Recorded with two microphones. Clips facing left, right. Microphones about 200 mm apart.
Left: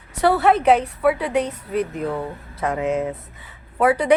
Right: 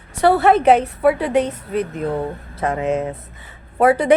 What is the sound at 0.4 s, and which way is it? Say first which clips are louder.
A woman's voice: right 2 dB; 25° right (ahead or behind).